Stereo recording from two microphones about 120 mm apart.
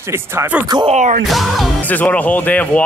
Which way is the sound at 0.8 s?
80° right.